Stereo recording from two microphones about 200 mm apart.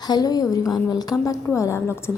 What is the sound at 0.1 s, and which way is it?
A woman's voice, 20° left (ahead or behind).